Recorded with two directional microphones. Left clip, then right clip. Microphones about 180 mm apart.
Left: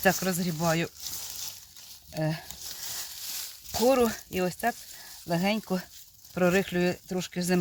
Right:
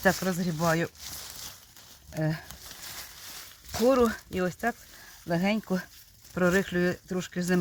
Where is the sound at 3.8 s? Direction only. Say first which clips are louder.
Even; 15° left (ahead or behind).